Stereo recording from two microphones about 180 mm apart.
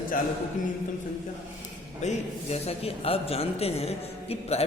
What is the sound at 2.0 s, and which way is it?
A man's voice, 40° left (ahead or behind).